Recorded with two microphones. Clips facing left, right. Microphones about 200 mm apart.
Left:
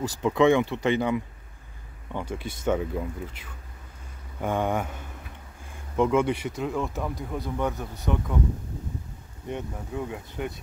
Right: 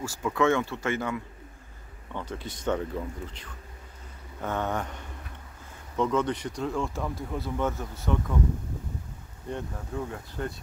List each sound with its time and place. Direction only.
0.0 s speech: 20° left (ahead or behind)
7.2 s speech: 15° left (ahead or behind)
9.5 s speech: 15° left (ahead or behind)